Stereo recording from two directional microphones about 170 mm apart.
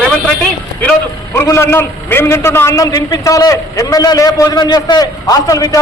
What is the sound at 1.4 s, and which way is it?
A man's voice, 15° left (ahead or behind).